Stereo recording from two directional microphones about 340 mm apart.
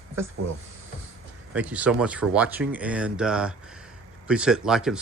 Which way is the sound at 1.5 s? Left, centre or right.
Centre.